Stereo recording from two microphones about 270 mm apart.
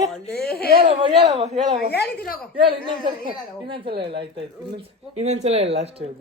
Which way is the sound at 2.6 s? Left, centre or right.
Centre.